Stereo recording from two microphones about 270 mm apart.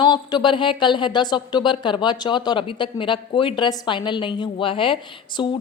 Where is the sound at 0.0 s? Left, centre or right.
Centre.